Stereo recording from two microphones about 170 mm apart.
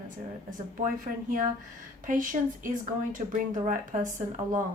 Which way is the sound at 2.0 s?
50° right (ahead or behind).